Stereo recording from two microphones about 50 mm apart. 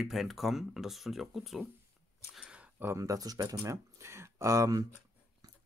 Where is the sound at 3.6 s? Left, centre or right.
Right.